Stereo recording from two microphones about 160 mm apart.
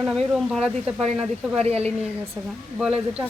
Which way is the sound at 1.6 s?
40° right (ahead or behind).